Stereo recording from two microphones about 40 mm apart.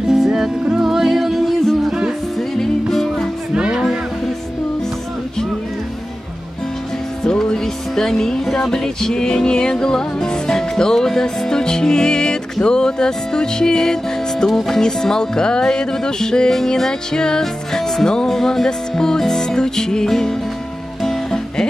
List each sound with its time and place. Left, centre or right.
0.1 s music: centre
1.6 s music: centre
1.9 s music: centre
2.5 s music: centre
3.5 s music: right
7.2 s music: centre
14.4 s speech: centre
21.0 s music: centre